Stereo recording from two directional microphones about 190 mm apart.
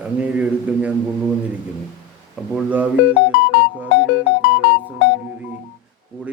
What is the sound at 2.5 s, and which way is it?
Speech, 10° right (ahead or behind).